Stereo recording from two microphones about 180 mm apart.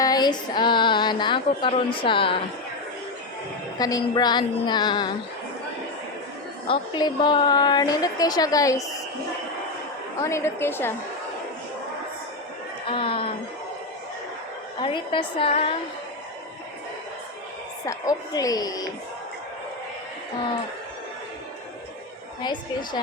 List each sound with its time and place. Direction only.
0.0 s a woman's voice: 20° left (ahead or behind)
3.8 s a woman's voice: 20° left (ahead or behind)
6.7 s a woman's voice: 25° left (ahead or behind)
10.2 s a woman's voice: 15° left (ahead or behind)
12.9 s a woman's voice: 30° left (ahead or behind)
14.8 s a woman's voice: 25° left (ahead or behind)
17.8 s a woman's voice: 20° left (ahead or behind)
22.4 s a woman's voice: 25° left (ahead or behind)